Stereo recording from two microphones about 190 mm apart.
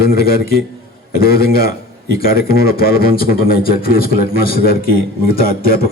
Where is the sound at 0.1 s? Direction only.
50° left (ahead or behind).